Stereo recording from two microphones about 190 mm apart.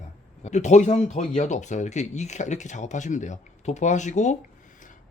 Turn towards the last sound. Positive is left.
turn(degrees=40)  # may be behind; listen again after turning